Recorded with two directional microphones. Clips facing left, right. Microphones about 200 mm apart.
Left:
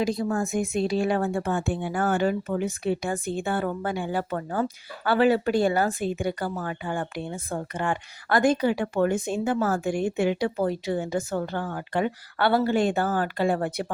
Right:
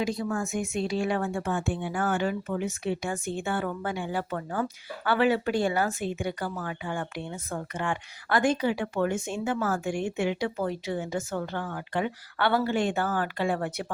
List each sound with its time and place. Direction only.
0.0 s speech: 35° left (ahead or behind)